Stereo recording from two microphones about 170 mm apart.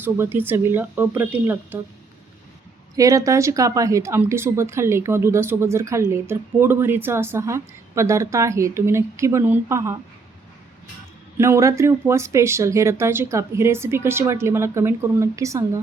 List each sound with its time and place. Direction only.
0.0 s a woman's voice: 10° right (ahead or behind)
2.9 s a woman's voice: 20° right (ahead or behind)
11.3 s a woman's voice: 15° right (ahead or behind)